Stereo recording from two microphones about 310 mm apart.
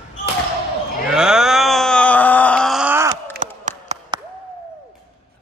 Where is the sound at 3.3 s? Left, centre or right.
Right.